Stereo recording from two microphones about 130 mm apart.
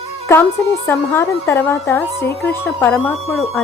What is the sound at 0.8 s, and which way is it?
A woman's voice, 20° left (ahead or behind).